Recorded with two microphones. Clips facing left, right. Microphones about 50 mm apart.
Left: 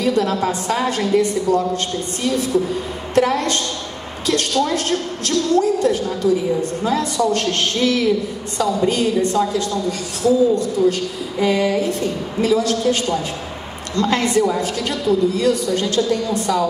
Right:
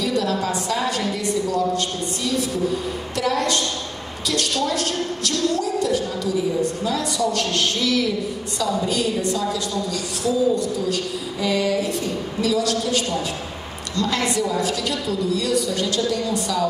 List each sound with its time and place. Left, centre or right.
0.0 s a woman's voice: left